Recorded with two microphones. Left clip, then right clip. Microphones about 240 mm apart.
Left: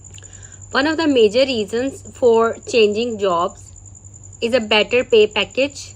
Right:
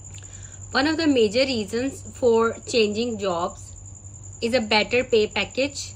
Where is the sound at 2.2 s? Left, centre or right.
Left.